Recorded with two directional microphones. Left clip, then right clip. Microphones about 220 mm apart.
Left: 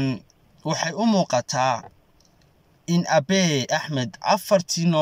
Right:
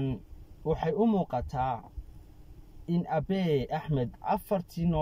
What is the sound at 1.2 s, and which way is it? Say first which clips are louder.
Speech: left 10 dB; 60° left (ahead or behind).